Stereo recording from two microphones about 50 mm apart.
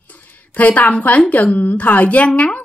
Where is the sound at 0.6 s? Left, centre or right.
Left.